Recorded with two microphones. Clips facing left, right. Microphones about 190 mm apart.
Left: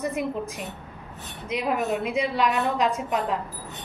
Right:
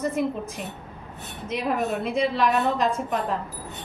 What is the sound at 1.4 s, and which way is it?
A woman's voice, 10° left (ahead or behind).